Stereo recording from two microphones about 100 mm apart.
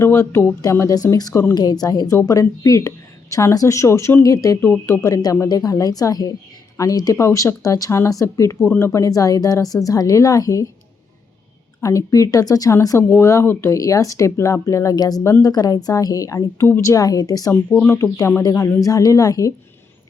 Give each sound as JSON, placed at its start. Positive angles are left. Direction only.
{"t": 0.0, "sound": "speech", "side_deg": 25}
{"t": 1.3, "sound": "speech", "side_deg": 25}
{"t": 1.5, "sound": "speech", "side_deg": 40}
{"t": 11.8, "sound": "speech", "side_deg": 35}
{"t": 17.5, "sound": "speech", "side_deg": 20}
{"t": 17.9, "sound": "speech", "side_deg": 30}